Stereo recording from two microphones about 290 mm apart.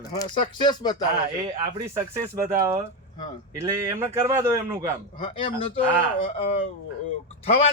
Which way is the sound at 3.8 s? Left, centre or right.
Centre.